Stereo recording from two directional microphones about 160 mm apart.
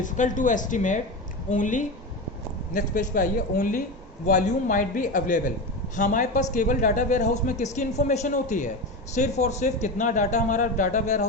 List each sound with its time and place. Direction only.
0.0 s a man's voice: 55° left (ahead or behind)